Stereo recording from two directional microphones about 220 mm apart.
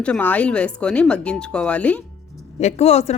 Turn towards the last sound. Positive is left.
turn(degrees=30)  # may be behind; listen again after turning